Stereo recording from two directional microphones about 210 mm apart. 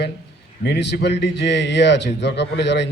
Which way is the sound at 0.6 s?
55° left (ahead or behind).